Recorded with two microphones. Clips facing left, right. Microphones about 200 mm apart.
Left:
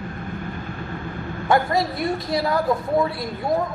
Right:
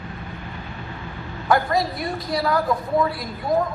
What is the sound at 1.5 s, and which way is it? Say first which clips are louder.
A woman's voice: even; 25° left (ahead or behind).